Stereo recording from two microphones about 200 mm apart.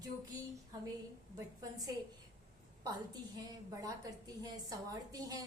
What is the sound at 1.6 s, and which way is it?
Speech, 15° right (ahead or behind).